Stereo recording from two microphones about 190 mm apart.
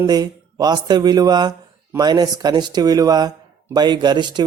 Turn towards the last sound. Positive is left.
turn(degrees=-25)  # may be behind; listen again after turning